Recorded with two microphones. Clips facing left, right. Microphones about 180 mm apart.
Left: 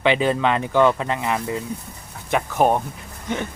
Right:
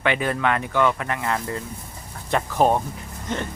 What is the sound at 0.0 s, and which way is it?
Speech, 20° left (ahead or behind).